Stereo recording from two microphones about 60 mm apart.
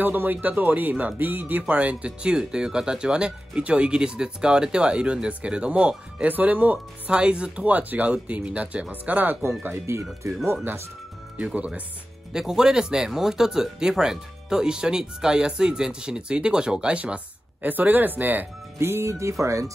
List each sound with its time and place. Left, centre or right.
0.0 s speech: right
10.2 s speech: right
11.3 s speech: right
12.3 s speech: centre; by 18.5 s right
18.8 s speech: right